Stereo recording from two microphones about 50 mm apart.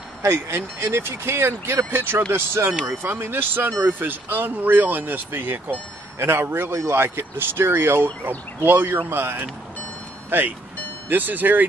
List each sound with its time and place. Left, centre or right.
0.2 s speech: right
2.9 s speech: right
11.1 s speech: right